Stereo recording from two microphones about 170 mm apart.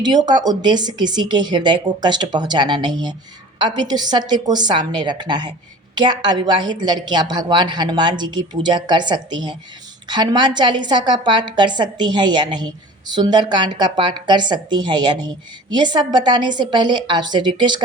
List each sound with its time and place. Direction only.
0.0 s a woman's voice: 25° right (ahead or behind)